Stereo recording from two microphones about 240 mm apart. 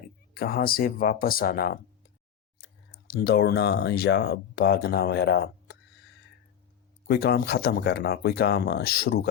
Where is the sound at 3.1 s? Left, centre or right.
Left.